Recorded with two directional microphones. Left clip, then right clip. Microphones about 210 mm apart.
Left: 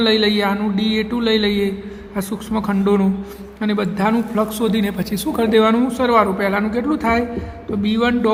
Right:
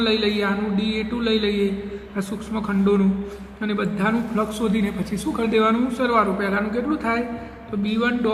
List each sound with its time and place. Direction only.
0.0 s a man's voice: 50° left (ahead or behind)